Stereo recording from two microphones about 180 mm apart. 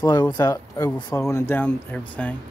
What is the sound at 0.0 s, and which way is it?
Speech, 20° left (ahead or behind).